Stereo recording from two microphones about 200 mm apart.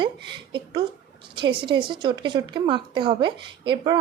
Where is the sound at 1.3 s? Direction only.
25° right (ahead or behind).